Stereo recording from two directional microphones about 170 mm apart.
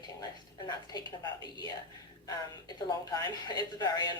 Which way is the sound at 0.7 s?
25° left (ahead or behind).